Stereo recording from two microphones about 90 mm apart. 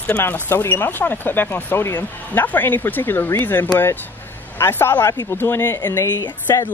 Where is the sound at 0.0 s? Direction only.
20° left (ahead or behind).